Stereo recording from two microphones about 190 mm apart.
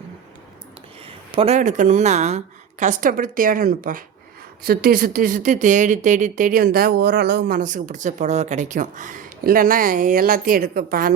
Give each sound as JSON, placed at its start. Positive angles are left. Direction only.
{"t": 1.0, "sound": "speech", "side_deg": -30}